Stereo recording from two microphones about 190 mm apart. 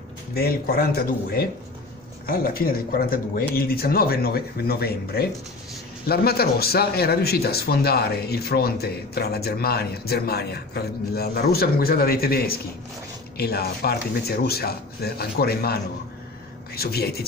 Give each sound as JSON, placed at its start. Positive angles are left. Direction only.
{"t": 0.3, "sound": "speech", "side_deg": 55}